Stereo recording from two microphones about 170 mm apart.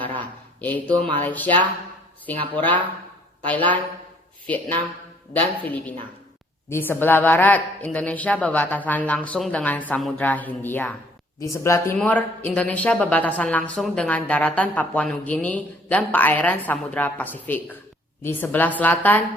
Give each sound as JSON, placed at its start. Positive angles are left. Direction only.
{"t": 0.2, "sound": "speech", "side_deg": 10}
{"t": 5.3, "sound": "speech", "side_deg": 10}